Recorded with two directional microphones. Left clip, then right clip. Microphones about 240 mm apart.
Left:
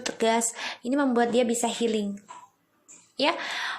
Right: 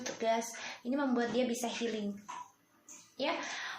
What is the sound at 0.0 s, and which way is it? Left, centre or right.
A woman's voice, left.